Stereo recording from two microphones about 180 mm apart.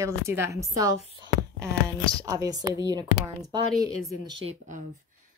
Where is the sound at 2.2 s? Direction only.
20° right (ahead or behind).